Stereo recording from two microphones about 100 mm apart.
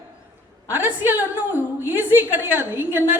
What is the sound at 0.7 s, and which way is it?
A woman's voice, 20° right (ahead or behind).